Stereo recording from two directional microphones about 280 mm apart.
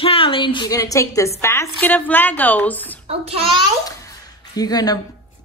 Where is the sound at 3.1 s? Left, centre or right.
Right.